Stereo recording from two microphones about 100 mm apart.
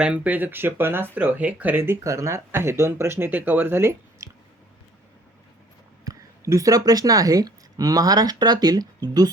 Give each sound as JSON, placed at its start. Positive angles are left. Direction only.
{"t": 0.0, "sound": "speech", "side_deg": -15}
{"t": 6.1, "sound": "a woman's voice", "side_deg": -35}